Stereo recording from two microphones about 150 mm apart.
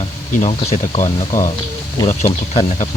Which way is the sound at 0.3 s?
45° left (ahead or behind).